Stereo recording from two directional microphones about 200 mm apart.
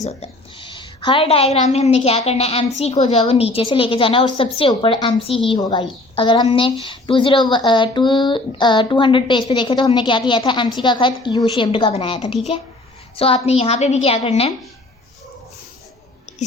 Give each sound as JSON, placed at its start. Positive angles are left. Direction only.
{"t": 0.0, "sound": "a woman's voice", "side_deg": 30}